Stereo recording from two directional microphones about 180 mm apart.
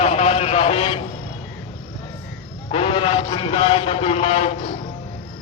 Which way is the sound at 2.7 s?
30° left (ahead or behind).